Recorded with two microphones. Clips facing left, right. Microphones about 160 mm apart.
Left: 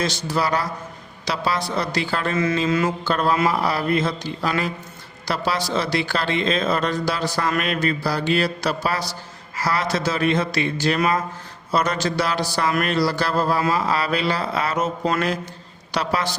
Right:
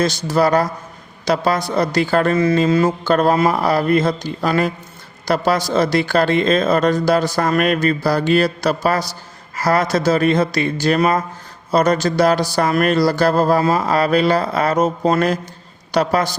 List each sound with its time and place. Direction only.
0.0 s speech: 45° right (ahead or behind)
2.3 s mantra: 35° right (ahead or behind)
3.0 s speech: 45° right (ahead or behind)